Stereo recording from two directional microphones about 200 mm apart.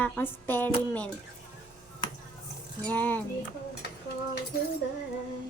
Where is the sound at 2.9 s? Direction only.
10° left (ahead or behind).